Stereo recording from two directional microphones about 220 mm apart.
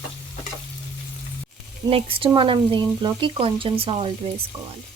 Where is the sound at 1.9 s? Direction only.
25° right (ahead or behind).